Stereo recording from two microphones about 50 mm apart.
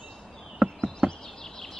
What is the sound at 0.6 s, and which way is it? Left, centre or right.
Knock, right.